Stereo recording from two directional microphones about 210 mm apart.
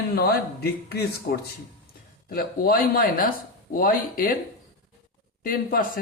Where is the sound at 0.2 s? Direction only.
50° left (ahead or behind).